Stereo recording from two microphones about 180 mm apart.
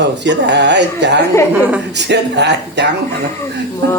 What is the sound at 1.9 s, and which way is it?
Speech, 75° right (ahead or behind).